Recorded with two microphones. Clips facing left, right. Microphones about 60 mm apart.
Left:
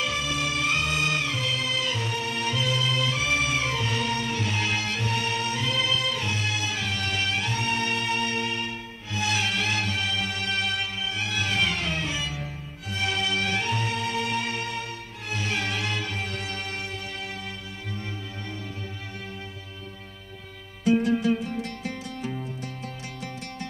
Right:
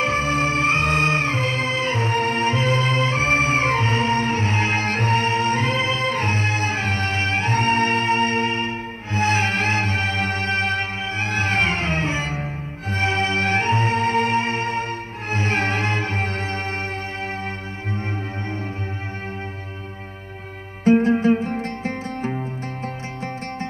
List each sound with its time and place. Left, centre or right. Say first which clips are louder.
0.0 s music: right 7 dB; right
20.8 s music: right 6 dB; right